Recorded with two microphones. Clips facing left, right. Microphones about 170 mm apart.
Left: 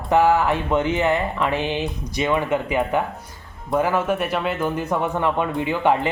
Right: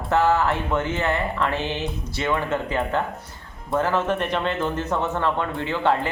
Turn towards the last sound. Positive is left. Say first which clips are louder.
# left 3 dB
turn(degrees=15)  # may be behind; listen again after turning